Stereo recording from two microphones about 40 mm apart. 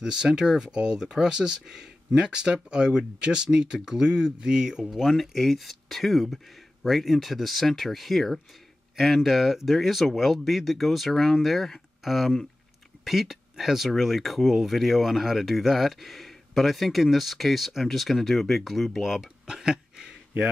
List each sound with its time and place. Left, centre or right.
0.0 s speech: centre
5.1 s speech: centre